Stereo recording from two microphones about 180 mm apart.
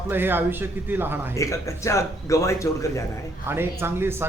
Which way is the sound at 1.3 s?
15° left (ahead or behind).